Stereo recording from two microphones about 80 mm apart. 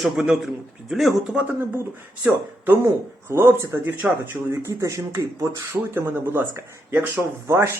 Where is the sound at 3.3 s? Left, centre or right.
Right.